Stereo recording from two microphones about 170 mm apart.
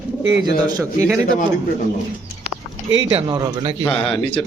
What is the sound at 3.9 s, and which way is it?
Speech, 5° left (ahead or behind).